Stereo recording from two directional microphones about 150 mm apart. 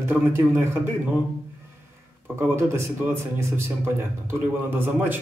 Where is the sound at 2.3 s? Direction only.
15° right (ahead or behind).